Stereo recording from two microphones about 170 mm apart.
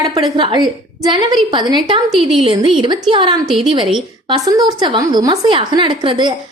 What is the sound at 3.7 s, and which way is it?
A woman's voice, 30° right (ahead or behind).